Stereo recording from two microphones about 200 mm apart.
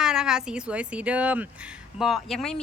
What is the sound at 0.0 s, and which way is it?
Speech, 5° right (ahead or behind).